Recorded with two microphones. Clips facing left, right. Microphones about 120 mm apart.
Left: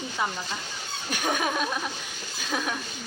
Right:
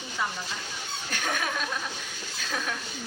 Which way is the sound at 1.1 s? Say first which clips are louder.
Left 4 dB; 15° left (ahead or behind).